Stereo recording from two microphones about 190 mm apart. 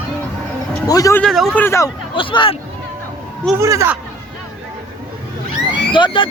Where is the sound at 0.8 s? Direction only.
20° left (ahead or behind).